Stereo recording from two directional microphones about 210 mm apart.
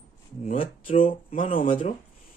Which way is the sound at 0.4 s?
35° left (ahead or behind).